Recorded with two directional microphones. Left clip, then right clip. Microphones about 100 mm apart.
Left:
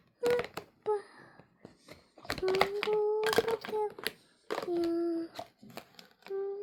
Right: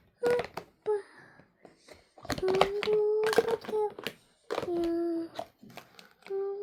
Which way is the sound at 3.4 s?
45° left (ahead or behind).